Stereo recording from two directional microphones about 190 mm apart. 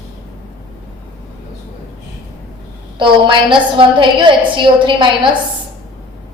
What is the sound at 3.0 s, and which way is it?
A woman's voice, 25° right (ahead or behind).